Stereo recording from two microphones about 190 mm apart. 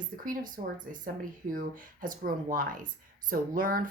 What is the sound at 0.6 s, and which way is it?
Speech, 45° right (ahead or behind).